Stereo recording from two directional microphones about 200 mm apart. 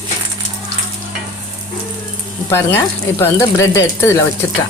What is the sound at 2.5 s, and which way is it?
Speech, 10° left (ahead or behind).